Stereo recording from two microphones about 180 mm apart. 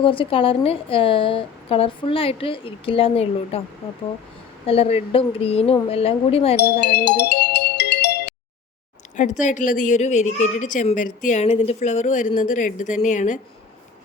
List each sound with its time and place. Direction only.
0.0 s a woman's voice: 30° left (ahead or behind)
4.6 s a woman's voice: 35° left (ahead or behind)
6.6 s music: 65° left (ahead or behind)
9.1 s a woman's voice: 45° left (ahead or behind)